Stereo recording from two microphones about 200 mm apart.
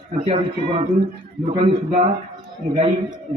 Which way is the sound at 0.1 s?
30° right (ahead or behind).